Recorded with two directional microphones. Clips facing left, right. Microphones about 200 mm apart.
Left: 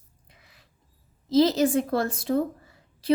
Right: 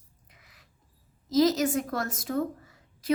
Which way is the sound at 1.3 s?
30° left (ahead or behind).